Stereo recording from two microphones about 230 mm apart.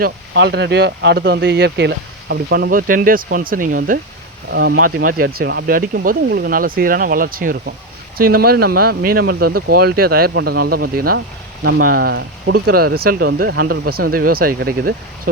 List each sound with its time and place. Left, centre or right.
0.0 s speech: right